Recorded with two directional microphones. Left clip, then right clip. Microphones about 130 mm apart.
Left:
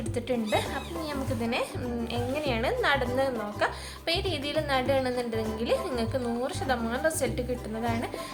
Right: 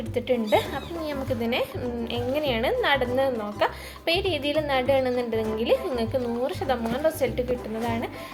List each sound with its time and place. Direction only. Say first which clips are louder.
0.5 s a woman's voice: right 5 dB; 20° right (ahead or behind)